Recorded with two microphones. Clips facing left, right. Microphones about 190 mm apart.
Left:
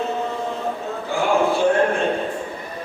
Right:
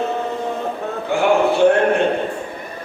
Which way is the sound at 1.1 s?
65° right (ahead or behind).